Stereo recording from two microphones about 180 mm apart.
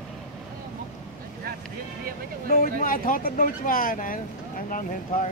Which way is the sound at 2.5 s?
50° left (ahead or behind).